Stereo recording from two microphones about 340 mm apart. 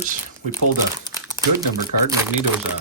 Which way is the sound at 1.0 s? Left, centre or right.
Centre.